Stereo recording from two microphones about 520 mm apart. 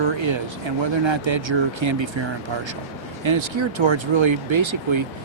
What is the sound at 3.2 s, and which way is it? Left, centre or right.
Speech, right.